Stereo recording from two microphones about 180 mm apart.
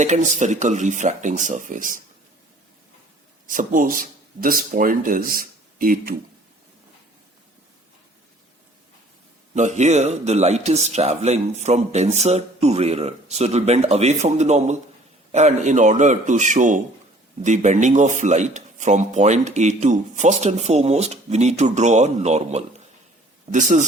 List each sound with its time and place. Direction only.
0.0 s speech: 40° right (ahead or behind)
3.4 s speech: 45° right (ahead or behind)
9.6 s speech: 40° right (ahead or behind)